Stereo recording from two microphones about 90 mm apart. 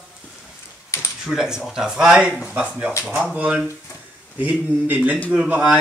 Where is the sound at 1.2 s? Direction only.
5° right (ahead or behind).